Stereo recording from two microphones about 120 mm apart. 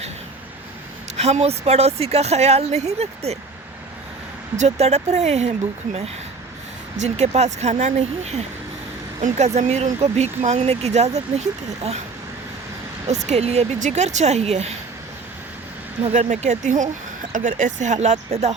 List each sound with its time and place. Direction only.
1.1 s a woman's voice: 65° right (ahead or behind)
4.5 s speech: 70° right (ahead or behind)
6.9 s speech: 70° right (ahead or behind)
13.2 s speech: 65° right (ahead or behind)
16.1 s speech: 80° right; by 18.5 s 65° right (ahead or behind)